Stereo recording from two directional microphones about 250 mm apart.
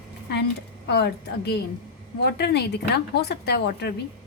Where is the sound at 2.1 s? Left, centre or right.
Left.